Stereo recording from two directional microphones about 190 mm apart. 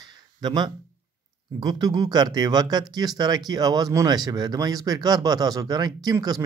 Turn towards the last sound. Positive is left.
turn(degrees=-20)  # may be behind; listen again after turning